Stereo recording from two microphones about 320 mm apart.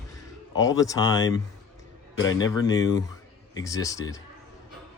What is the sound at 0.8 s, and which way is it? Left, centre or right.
Speech, centre.